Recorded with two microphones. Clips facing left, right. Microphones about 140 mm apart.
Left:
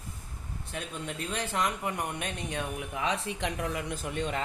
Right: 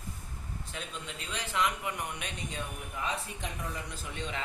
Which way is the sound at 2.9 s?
90° left.